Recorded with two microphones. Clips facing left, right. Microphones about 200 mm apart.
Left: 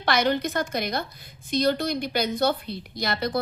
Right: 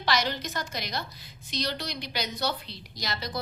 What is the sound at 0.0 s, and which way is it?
A woman's voice, 55° left (ahead or behind).